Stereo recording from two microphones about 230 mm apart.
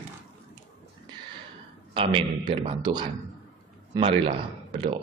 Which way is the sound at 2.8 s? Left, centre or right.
Centre.